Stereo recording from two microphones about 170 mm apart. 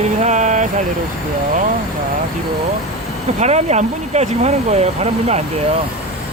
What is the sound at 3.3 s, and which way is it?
Speech, 40° right (ahead or behind).